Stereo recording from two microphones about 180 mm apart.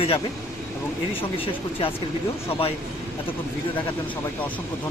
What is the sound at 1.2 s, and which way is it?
Speech, 30° left (ahead or behind).